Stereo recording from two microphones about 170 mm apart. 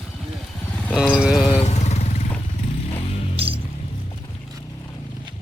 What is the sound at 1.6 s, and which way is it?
Motorcycle, 40° left (ahead or behind).